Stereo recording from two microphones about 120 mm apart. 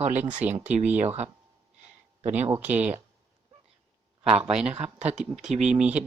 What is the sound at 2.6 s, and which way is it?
Speech, 10° right (ahead or behind).